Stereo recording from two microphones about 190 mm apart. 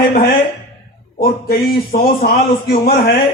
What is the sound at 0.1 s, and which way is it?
A man's voice, 50° left (ahead or behind).